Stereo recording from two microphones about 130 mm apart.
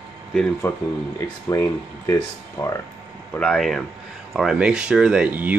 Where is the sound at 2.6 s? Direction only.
30° left (ahead or behind).